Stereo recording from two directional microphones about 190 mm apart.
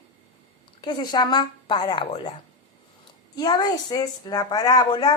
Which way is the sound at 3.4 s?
20° left (ahead or behind).